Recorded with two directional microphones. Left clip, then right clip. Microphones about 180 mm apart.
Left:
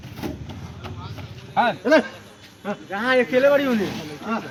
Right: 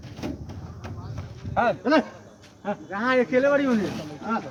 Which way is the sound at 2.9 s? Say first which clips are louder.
Left 3 dB; 65° right (ahead or behind).